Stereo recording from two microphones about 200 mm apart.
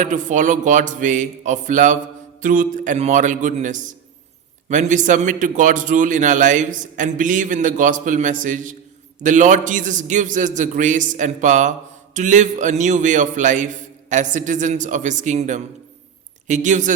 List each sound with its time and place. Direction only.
0.0 s a man's voice: 40° right (ahead or behind)